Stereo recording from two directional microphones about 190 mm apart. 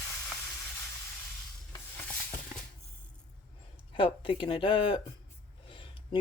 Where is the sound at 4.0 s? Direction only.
25° left (ahead or behind).